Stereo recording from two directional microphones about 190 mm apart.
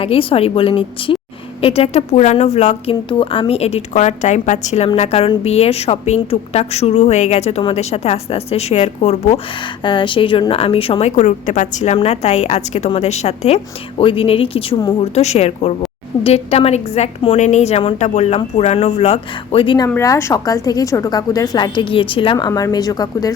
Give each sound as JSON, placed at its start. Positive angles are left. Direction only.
{"t": 0.0, "sound": "a woman's voice", "side_deg": 30}
{"t": 9.8, "sound": "a woman's voice", "side_deg": 25}
{"t": 11.1, "sound": "a woman's voice", "side_deg": 40}